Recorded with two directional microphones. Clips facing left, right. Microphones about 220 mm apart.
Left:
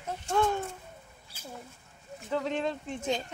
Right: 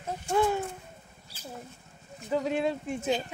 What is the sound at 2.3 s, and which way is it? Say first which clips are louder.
Speech: right 3 dB; 10° right (ahead or behind).